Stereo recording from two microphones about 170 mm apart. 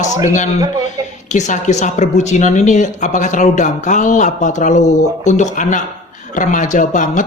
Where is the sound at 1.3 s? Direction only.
45° left (ahead or behind).